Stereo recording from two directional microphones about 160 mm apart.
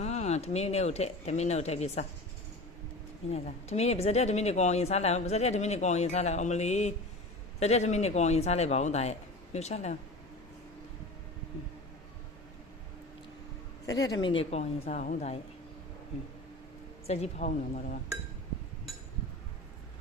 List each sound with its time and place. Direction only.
0.0 s speech: 45° left (ahead or behind)
3.2 s speech: 40° left (ahead or behind)
13.8 s a woman's voice: 20° left (ahead or behind)
14.6 s speech: 50° left (ahead or behind)
17.1 s speech: 45° left (ahead or behind)